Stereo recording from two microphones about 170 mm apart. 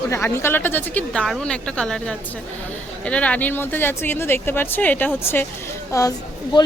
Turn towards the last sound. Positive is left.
turn(degrees=20)  # may be behind; listen again after turning